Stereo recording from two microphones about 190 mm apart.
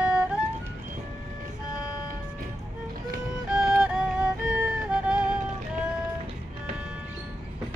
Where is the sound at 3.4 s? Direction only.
5° right (ahead or behind).